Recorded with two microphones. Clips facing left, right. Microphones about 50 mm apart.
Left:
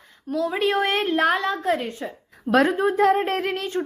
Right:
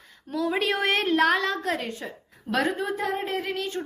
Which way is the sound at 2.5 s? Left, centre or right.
Left.